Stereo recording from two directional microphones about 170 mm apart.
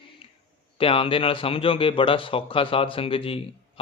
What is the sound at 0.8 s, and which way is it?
Speech, 35° left (ahead or behind).